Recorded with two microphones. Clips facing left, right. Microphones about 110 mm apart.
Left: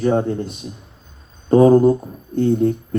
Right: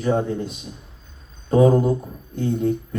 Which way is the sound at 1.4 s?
45° left (ahead or behind).